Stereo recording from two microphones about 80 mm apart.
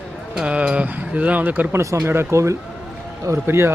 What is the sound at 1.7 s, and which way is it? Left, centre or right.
Speech, right.